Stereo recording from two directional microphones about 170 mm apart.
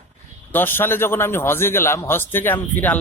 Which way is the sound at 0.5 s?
10° left (ahead or behind).